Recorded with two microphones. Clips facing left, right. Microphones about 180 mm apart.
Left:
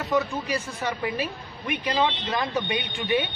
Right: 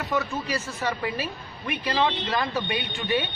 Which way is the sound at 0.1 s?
10° left (ahead or behind).